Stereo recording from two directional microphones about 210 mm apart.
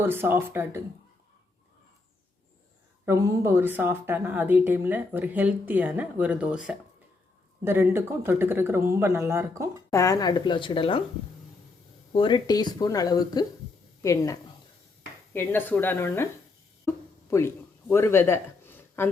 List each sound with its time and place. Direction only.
0.0 s a woman's voice: 10° right (ahead or behind)
3.1 s a woman's voice: 10° right (ahead or behind)
9.9 s speech: 15° left (ahead or behind)
12.1 s speech: 20° left (ahead or behind)
16.8 s a sound: 10° left (ahead or behind)